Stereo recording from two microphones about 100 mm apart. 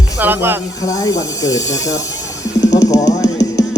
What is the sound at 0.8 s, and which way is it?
Speech, 35° left (ahead or behind).